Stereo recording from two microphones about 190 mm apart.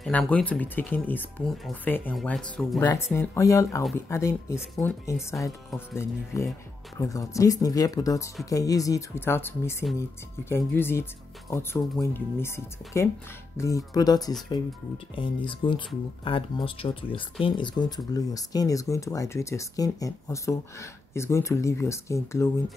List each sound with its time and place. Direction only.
0.0 s speech: 5° left (ahead or behind)